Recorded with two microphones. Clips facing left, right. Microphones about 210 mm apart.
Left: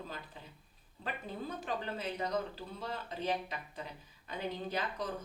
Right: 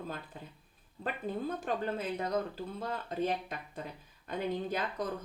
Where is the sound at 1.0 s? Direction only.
50° right (ahead or behind).